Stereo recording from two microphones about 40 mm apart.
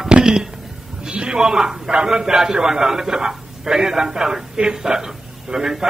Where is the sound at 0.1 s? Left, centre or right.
Centre.